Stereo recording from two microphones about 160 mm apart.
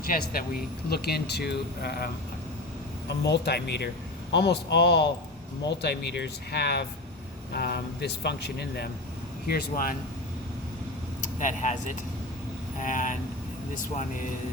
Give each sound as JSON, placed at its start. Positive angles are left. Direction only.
{"t": 0.1, "sound": "speech", "side_deg": 65}
{"t": 3.1, "sound": "speech", "side_deg": 90}
{"t": 9.5, "sound": "speech", "side_deg": 65}
{"t": 11.2, "sound": "speech", "side_deg": 50}